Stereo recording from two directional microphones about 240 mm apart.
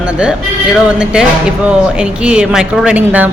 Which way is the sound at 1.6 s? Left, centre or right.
Centre.